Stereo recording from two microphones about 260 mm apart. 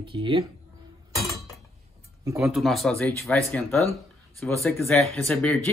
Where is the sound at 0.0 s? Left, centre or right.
Centre.